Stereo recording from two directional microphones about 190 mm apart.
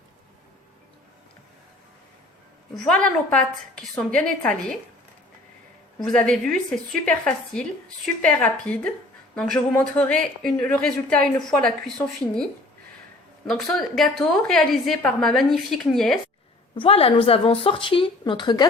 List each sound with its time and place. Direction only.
2.7 s a woman's voice: 5° left (ahead or behind)
6.1 s a woman's voice: 5° left (ahead or behind)
13.5 s a woman's voice: centre (ahead or behind)
16.7 s a woman's voice: 30° left (ahead or behind)